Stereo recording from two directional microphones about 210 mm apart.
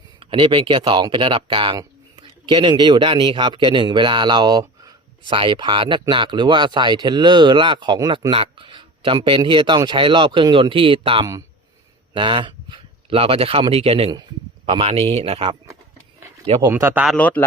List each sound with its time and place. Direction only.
0.2 s speech: 25° right (ahead or behind)
16.6 s speech: 10° right (ahead or behind)
17.2 s a man's voice: 5° left (ahead or behind)